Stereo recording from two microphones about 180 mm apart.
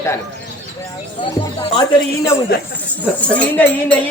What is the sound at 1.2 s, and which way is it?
Speech, 25° left (ahead or behind).